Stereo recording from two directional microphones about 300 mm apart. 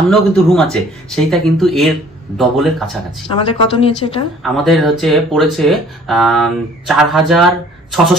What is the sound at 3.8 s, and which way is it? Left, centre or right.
Speech, centre.